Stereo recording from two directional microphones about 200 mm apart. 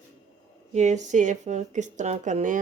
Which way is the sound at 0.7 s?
35° right (ahead or behind).